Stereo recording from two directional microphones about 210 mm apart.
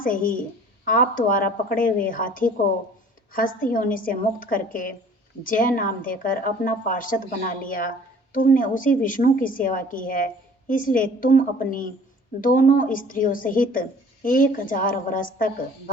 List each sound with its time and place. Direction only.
0.0 s speech: 40° left (ahead or behind)